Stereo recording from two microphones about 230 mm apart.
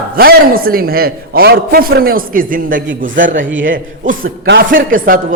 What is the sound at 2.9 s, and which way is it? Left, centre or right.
Speech, right.